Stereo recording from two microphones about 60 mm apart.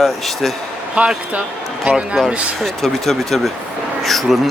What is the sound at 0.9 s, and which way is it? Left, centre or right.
A man's voice, right.